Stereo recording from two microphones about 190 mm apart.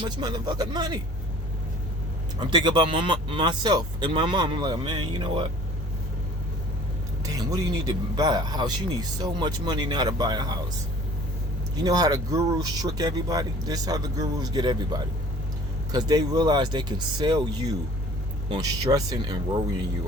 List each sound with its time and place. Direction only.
0.0 s speech: 20° right (ahead or behind)
2.5 s speech: 25° right (ahead or behind)
7.3 s speech: 20° right (ahead or behind)
11.8 s speech: 20° right (ahead or behind)